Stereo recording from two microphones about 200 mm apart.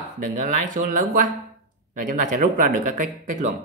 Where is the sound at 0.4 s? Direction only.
40° right (ahead or behind).